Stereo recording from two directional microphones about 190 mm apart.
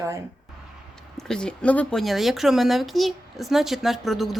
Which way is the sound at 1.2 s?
5° left (ahead or behind).